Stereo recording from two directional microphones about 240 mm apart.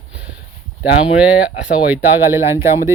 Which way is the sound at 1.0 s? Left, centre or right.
Centre.